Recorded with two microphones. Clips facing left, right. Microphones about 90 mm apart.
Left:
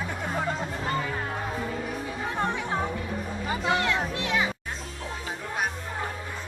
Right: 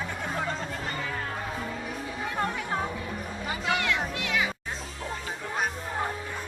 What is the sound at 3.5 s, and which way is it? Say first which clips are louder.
Music: left 3 dB; 30° left (ahead or behind).